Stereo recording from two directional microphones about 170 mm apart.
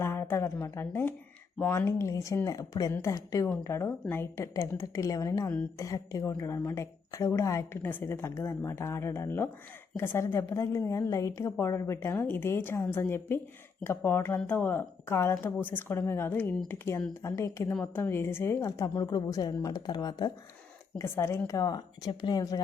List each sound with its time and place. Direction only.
0.0 s a woman's voice: 15° left (ahead or behind)